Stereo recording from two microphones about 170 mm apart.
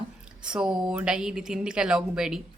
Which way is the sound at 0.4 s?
5° right (ahead or behind).